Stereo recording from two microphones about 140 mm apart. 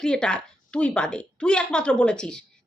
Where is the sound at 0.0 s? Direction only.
5° left (ahead or behind).